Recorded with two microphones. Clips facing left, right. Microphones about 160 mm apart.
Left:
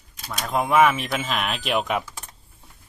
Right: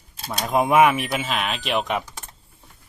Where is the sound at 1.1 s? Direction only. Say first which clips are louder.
Right 1 dB; centre (ahead or behind).